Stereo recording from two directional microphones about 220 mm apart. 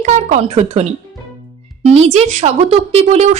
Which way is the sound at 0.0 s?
30° right (ahead or behind).